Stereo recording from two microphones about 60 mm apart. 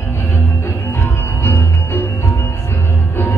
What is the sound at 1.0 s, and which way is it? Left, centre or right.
Music, left.